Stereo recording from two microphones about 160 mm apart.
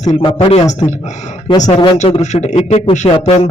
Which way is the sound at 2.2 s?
45° left (ahead or behind).